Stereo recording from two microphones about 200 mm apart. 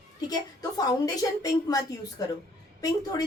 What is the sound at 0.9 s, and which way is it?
A woman's voice, 20° left (ahead or behind).